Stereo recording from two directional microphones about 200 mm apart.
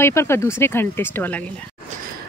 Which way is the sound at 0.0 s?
15° left (ahead or behind).